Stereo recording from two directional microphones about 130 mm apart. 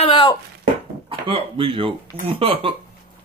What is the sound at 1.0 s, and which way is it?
Speech, 45° right (ahead or behind).